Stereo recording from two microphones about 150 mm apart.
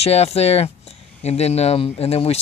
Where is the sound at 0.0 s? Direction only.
45° left (ahead or behind).